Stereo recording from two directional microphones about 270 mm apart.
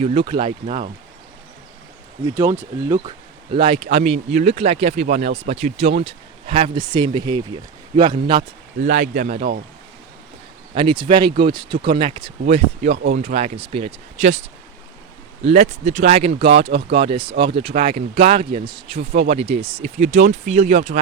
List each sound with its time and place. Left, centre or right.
0.0 s speech: centre
2.2 s speech: centre; by 9.6 s right
10.8 s speech: centre